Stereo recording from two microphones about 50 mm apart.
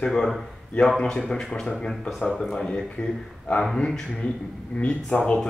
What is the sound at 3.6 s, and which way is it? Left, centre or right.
Speech, centre.